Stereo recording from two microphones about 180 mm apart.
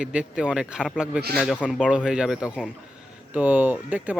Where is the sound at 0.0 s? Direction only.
5° right (ahead or behind).